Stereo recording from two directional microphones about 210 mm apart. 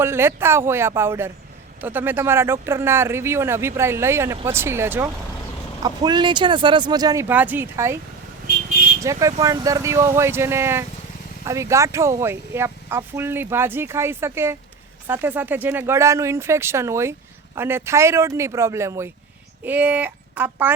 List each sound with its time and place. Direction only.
0.0 s speech: 10° right (ahead or behind)
9.0 s speech: 15° right (ahead or behind)